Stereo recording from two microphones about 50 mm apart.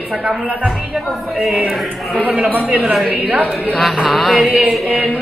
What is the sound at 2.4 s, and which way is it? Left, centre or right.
A man's voice, right.